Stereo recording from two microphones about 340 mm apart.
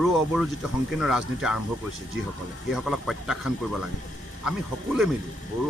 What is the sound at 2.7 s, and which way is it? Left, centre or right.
Speech, centre.